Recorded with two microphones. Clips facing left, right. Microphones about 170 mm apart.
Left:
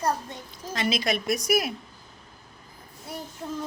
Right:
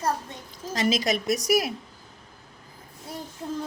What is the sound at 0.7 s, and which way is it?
Speech, 40° right (ahead or behind).